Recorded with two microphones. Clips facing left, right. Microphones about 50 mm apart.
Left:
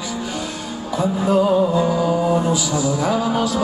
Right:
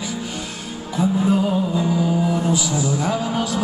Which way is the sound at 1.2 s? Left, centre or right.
Centre.